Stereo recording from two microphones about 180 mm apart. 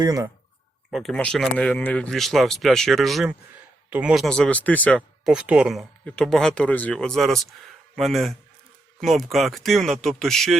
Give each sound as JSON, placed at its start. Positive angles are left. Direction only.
{"t": 0.0, "sound": "speech", "side_deg": -20}
{"t": 0.9, "sound": "speech", "side_deg": 0}